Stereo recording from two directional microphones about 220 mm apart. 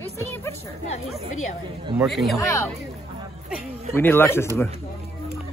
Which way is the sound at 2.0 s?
Centre (ahead or behind).